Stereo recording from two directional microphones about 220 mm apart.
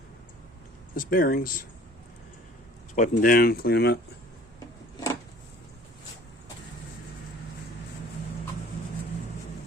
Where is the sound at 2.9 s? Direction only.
35° left (ahead or behind).